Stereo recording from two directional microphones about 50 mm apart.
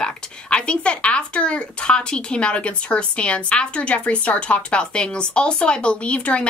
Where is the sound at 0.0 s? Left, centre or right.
Left.